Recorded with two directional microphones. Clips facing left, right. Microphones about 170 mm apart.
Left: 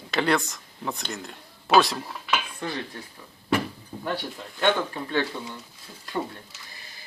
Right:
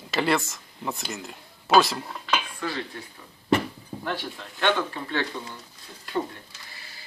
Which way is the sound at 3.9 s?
10° right (ahead or behind).